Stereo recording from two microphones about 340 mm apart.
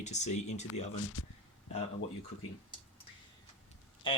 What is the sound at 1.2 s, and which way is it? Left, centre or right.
Speech, left.